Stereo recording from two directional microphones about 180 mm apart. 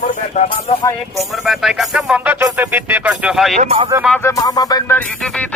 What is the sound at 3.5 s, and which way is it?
Speech, 35° right (ahead or behind).